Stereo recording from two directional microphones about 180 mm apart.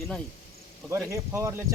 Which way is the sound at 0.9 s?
15° right (ahead or behind).